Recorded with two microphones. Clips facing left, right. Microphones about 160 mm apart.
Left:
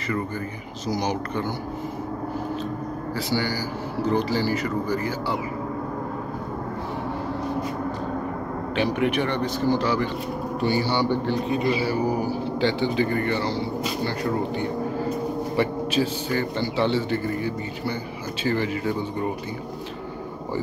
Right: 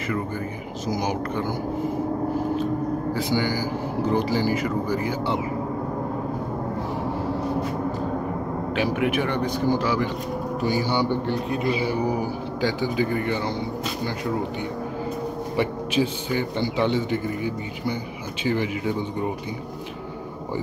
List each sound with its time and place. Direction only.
0.9 s a man's voice: 10° right (ahead or behind)
4.0 s a man's voice: 10° right (ahead or behind)
8.7 s a man's voice: 5° right (ahead or behind)
11.8 s a man's voice: 15° right (ahead or behind)
15.5 s a man's voice: 15° right (ahead or behind)